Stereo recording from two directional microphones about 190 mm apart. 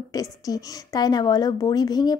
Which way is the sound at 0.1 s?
20° left (ahead or behind).